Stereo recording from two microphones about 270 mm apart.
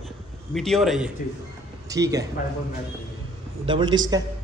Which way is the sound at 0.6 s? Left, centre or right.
Centre.